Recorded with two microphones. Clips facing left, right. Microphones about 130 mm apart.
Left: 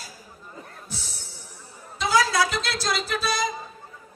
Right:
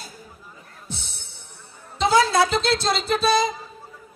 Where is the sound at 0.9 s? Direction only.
25° right (ahead or behind).